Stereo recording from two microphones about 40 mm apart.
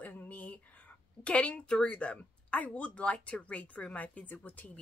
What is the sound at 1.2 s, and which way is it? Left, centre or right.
Speech, left.